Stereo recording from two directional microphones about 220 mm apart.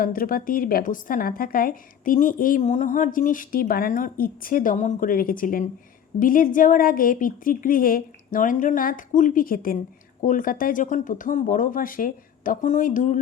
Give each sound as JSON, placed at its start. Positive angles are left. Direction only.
{"t": 0.0, "sound": "a woman's voice", "side_deg": 40}